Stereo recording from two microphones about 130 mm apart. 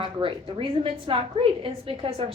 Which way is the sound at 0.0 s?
40° right (ahead or behind).